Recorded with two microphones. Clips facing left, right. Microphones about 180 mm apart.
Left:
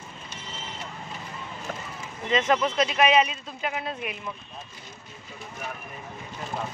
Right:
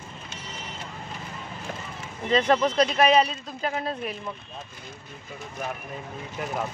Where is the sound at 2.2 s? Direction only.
35° right (ahead or behind).